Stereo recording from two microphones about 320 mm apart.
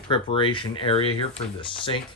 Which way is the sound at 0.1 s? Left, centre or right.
Centre.